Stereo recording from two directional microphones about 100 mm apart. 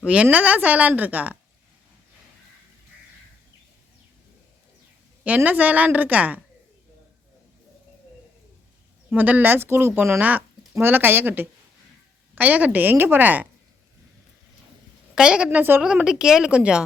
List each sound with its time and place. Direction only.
0.0 s speech: 10° right (ahead or behind)
5.2 s speech: 15° right (ahead or behind)
9.0 s speech: 15° right (ahead or behind)
15.1 s a woman's voice: 10° right (ahead or behind)
15.4 s speech: 20° right (ahead or behind)
15.8 s speech: 10° right (ahead or behind)